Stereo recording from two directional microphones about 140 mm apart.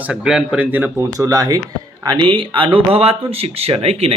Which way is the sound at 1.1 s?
25° right (ahead or behind).